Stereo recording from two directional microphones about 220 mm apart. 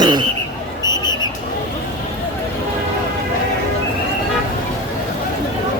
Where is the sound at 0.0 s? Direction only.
20° right (ahead or behind).